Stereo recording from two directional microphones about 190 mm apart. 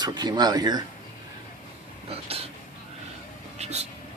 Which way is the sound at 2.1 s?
30° right (ahead or behind).